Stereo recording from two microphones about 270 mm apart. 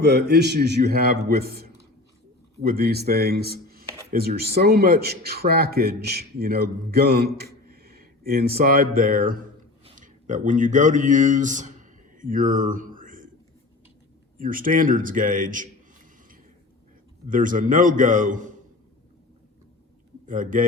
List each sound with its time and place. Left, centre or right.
0.0 s speech: right
14.3 s a man's voice: right
17.2 s a man's voice: right
20.2 s a man's voice: right